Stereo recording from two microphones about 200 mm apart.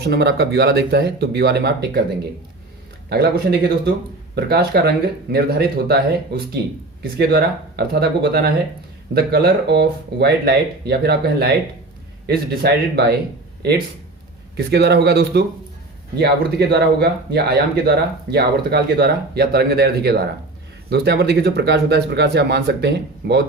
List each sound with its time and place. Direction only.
0.0 s speech: 55° right (ahead or behind)
3.1 s speech: 50° right (ahead or behind)
14.5 s speech: 55° right (ahead or behind)